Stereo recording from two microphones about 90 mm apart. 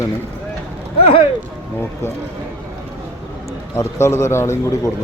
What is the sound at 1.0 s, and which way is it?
Speech, 90° left.